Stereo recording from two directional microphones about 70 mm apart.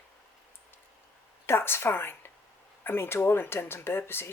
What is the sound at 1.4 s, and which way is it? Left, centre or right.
A woman's voice, left.